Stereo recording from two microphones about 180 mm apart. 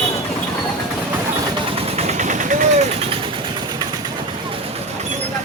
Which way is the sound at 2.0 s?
40° right (ahead or behind).